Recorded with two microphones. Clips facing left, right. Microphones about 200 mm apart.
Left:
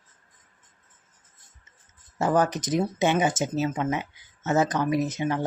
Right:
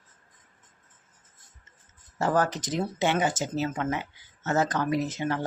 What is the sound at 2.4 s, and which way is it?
Speech, 20° left (ahead or behind).